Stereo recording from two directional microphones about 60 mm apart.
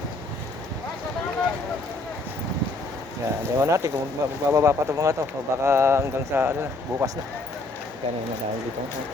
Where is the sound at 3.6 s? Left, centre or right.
Right.